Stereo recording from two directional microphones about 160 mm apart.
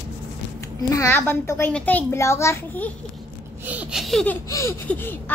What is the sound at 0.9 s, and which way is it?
A woman's voice, 20° left (ahead or behind).